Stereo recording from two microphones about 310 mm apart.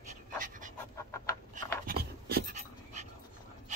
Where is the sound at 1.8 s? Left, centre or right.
Right.